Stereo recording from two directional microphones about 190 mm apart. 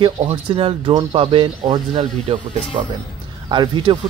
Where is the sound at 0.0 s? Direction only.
30° right (ahead or behind).